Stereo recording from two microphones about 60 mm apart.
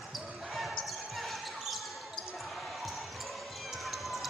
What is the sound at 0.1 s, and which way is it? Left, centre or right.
Basketball bounce, centre.